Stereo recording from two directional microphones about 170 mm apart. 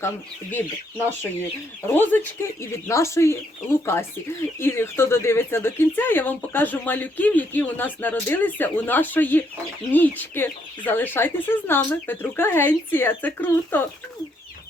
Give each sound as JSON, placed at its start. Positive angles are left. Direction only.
{"t": 0.5, "sound": "speech", "side_deg": 10}